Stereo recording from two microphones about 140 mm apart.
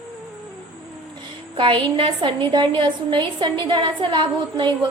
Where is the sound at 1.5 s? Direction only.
35° right (ahead or behind).